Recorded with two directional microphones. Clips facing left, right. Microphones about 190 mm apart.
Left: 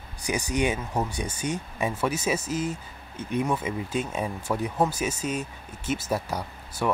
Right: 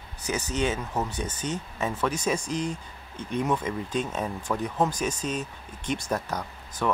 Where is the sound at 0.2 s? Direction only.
15° left (ahead or behind).